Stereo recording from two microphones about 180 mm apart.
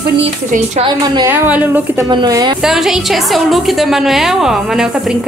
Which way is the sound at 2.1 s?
25° right (ahead or behind).